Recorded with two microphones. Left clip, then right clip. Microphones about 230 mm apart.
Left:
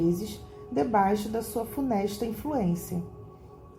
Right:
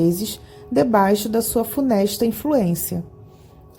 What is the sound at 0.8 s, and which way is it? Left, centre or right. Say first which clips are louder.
A woman's voice: right 8 dB; right.